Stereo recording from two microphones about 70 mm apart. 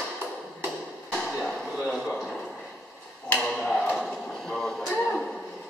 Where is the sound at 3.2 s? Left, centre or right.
Centre.